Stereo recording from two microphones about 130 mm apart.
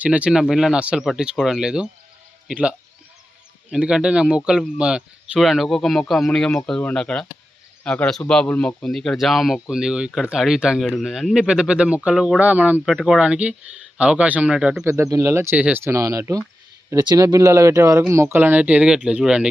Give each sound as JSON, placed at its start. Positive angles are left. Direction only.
{"t": 0.0, "sound": "speech", "side_deg": -10}
{"t": 12.9, "sound": "speech", "side_deg": 0}
{"t": 14.8, "sound": "speech", "side_deg": -25}